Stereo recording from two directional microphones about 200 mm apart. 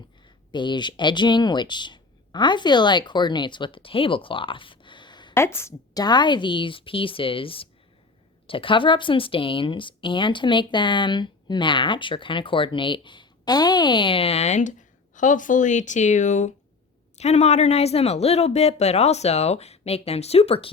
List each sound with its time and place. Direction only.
0.5 s speech: 25° left (ahead or behind)
5.3 s speech: 10° left (ahead or behind); by 20.7 s 30° left (ahead or behind)